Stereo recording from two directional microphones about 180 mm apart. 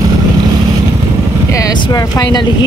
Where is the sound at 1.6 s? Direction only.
20° left (ahead or behind).